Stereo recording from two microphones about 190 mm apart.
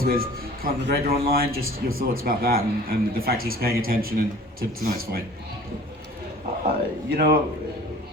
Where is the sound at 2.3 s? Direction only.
50° right (ahead or behind).